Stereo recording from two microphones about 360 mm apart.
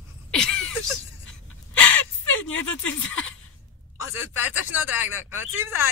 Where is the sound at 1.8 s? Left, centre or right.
Left.